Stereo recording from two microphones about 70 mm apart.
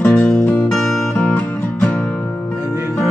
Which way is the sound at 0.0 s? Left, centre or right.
Left.